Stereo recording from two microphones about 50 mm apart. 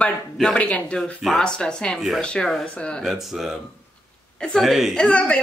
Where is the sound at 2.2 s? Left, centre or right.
Centre.